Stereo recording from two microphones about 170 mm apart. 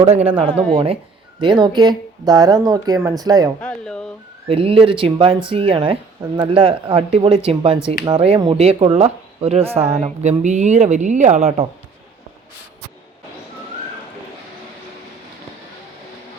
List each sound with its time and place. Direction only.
0.0 s speech: 35° right (ahead or behind)
3.6 s speech: 5° left (ahead or behind)
4.4 s speech: 35° right (ahead or behind)